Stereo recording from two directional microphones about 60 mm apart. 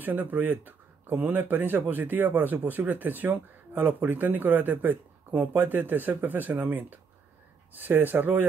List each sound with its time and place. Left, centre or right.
0.0 s speech: right